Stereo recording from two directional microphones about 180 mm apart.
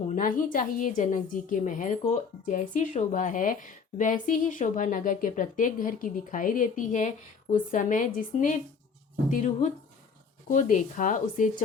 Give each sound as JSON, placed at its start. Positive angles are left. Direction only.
{"t": 0.1, "sound": "a woman's voice", "side_deg": 50}